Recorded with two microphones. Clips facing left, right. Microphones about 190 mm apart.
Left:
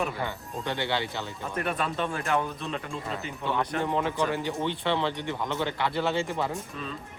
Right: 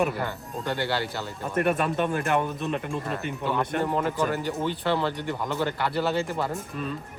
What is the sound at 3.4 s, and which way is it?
Speech, centre (ahead or behind).